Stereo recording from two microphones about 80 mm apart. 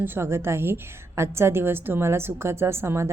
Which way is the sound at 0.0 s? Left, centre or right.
Right.